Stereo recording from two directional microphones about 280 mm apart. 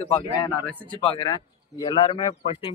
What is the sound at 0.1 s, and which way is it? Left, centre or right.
A man's voice, centre.